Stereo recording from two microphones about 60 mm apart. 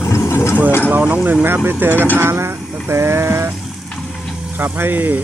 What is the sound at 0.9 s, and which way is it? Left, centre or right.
Speech, right.